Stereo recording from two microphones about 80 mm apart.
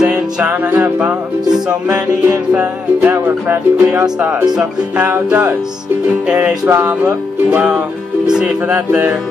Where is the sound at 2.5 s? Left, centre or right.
Right.